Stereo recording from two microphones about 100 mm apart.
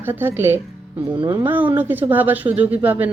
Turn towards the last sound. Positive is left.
turn(degrees=-15)  # may be behind; listen again after turning